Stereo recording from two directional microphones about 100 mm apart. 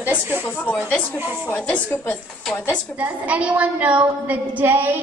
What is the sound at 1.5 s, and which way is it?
Speech, 20° left (ahead or behind).